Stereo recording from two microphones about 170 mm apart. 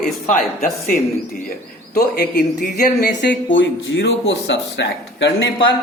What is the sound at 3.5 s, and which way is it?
Speech, 90° left.